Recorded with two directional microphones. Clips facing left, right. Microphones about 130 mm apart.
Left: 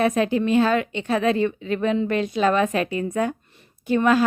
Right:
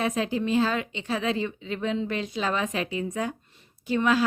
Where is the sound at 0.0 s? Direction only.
60° left (ahead or behind).